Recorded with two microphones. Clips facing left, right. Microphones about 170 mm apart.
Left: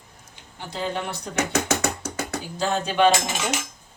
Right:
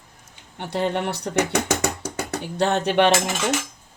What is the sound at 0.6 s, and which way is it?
Speech, 65° right (ahead or behind).